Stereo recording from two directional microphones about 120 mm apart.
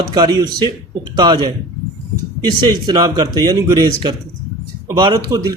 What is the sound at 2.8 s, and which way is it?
Speech, 35° right (ahead or behind).